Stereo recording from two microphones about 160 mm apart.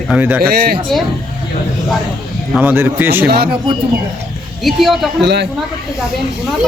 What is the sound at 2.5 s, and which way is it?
Speech, 10° right (ahead or behind).